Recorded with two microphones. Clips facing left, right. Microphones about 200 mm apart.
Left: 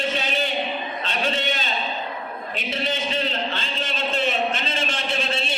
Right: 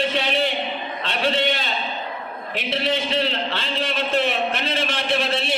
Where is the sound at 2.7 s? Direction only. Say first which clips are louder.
Right 4 dB; 70° right (ahead or behind).